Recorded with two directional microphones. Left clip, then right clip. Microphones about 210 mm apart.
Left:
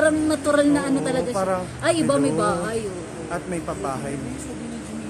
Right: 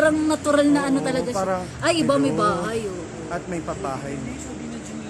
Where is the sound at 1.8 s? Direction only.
30° right (ahead or behind).